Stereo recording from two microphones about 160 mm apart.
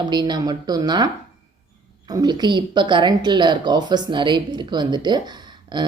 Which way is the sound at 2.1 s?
25° right (ahead or behind).